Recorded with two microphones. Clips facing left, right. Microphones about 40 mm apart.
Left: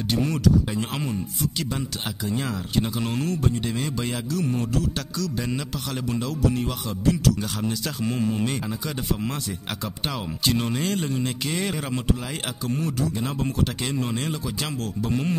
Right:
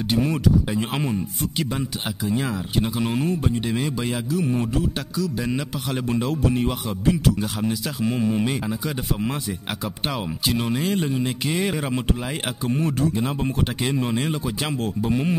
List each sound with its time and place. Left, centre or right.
0.1 s speech: centre
6.2 s speech: right; by 12.0 s centre
12.6 s speech: right